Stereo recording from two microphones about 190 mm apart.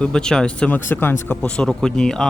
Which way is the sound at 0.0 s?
5° left (ahead or behind).